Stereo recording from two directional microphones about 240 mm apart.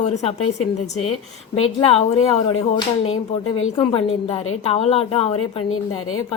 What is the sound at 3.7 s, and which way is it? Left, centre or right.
Speech, centre.